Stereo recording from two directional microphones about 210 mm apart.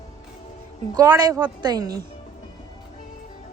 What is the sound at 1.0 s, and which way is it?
A woman's voice, 20° right (ahead or behind).